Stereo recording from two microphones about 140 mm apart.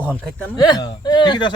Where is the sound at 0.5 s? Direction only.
30° left (ahead or behind).